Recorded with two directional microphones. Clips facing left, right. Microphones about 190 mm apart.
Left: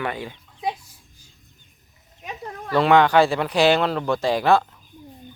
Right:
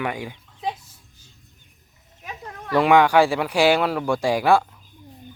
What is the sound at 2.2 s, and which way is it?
Goat, 20° left (ahead or behind).